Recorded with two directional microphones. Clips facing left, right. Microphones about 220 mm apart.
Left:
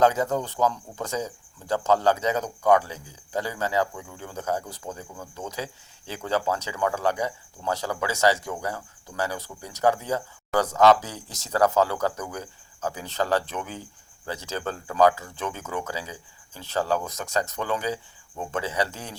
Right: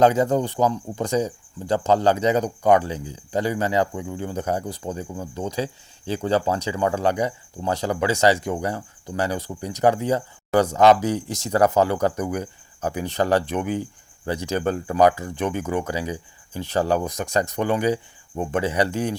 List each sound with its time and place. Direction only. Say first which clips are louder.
0.2 s speech: right 5 dB; 15° right (ahead or behind)